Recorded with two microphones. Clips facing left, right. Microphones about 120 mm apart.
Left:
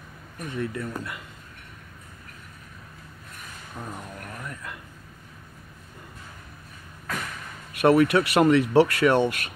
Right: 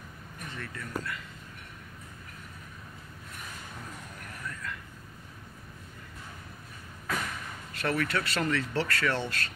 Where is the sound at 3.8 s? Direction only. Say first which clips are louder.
Left 7 dB; 55° left (ahead or behind).